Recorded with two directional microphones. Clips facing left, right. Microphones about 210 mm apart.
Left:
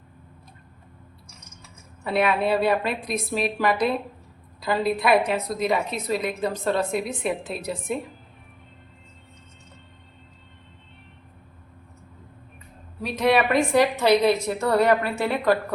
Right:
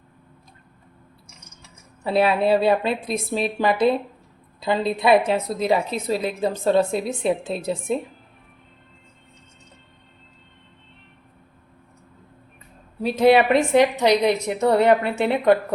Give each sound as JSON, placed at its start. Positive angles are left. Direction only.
{"t": 2.0, "sound": "a woman's voice", "side_deg": -30}
{"t": 13.0, "sound": "a woman's voice", "side_deg": -30}